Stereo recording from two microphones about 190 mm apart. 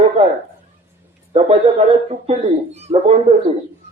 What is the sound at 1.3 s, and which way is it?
Speech, 30° right (ahead or behind).